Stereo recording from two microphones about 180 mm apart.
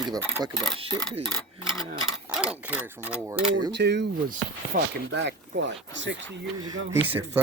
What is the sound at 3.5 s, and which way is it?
Speech, 70° right (ahead or behind).